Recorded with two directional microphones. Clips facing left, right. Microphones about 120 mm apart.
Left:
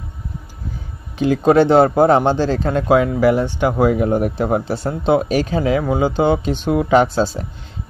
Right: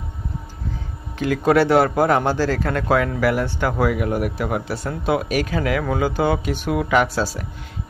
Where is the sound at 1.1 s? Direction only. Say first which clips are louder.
Left 4 dB; 25° left (ahead or behind).